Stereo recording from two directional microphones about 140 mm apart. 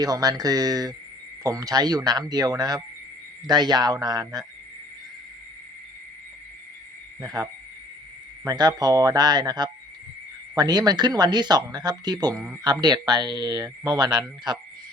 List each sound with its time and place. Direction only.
0.0 s speech: 25° right (ahead or behind)
7.2 s speech: 25° right (ahead or behind)